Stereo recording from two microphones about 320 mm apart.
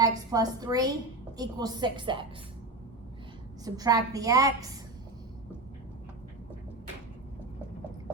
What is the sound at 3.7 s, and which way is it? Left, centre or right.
A woman's voice, centre.